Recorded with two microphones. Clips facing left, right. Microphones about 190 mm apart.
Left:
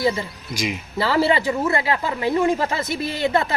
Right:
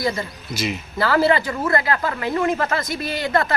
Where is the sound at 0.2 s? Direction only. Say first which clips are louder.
Even; 10° left (ahead or behind).